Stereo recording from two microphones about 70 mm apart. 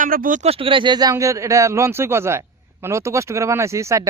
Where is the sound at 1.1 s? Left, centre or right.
Right.